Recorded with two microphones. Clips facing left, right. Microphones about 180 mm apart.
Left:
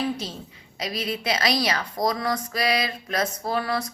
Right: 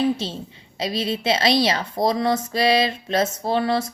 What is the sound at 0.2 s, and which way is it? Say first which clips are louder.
A woman's voice: right 5 dB; 30° right (ahead or behind).